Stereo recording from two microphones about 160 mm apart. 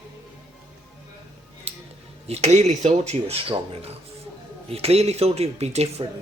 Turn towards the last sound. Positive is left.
turn(degrees=-40)  # may be behind; listen again after turning